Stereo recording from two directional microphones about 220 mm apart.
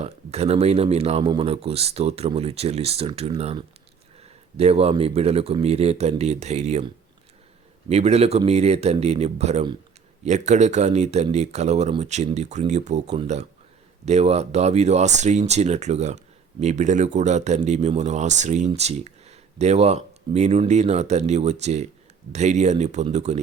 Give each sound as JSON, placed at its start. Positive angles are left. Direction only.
{"t": 0.0, "sound": "speech", "side_deg": -30}
{"t": 7.9, "sound": "speech", "side_deg": -30}